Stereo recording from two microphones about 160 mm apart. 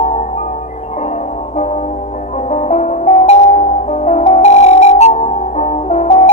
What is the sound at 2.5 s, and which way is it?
Music, 45° left (ahead or behind).